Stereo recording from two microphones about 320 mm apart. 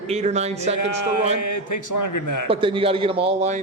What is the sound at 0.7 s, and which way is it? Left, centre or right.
A man's voice, left.